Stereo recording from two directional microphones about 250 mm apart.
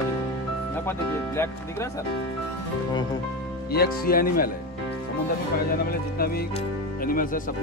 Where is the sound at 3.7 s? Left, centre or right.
Left.